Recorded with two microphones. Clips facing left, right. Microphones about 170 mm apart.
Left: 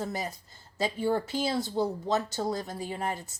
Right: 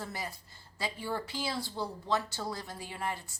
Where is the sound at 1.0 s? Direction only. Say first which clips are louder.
Left 9 dB; 50° left (ahead or behind).